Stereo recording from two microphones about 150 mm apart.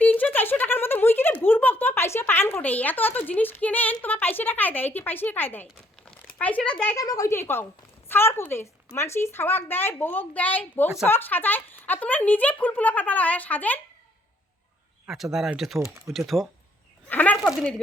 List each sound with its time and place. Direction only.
0.0 s a sound: 10° left (ahead or behind)
4.0 s speech: 10° left (ahead or behind)
6.9 s speech: 25° left (ahead or behind)
15.0 s speech: centre (ahead or behind)
17.1 s speech: 10° left (ahead or behind)